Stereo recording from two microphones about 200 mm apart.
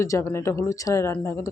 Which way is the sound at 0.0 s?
15° left (ahead or behind).